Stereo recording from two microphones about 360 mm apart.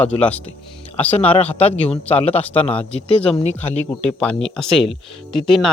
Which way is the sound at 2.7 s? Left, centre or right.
Centre.